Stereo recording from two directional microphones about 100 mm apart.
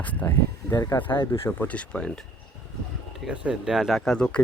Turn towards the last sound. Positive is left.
turn(degrees=10)  # may be behind; listen again after turning